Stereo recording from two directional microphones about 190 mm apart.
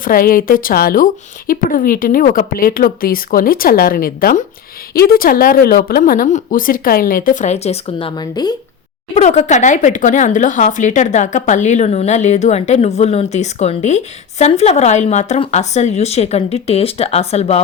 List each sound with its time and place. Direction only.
0.0 s a woman's voice: 50° left (ahead or behind); by 8.5 s 20° left (ahead or behind)
9.1 s speech: 35° left (ahead or behind)